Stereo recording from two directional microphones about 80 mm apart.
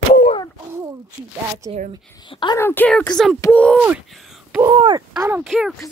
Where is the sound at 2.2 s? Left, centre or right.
Left.